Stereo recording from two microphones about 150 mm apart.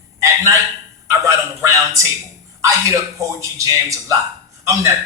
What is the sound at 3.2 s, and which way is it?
A man's voice, 20° right (ahead or behind).